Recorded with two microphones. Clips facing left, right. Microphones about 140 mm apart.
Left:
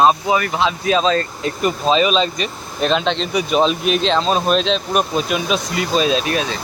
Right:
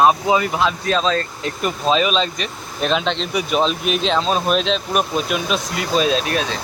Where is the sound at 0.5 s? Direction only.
5° left (ahead or behind).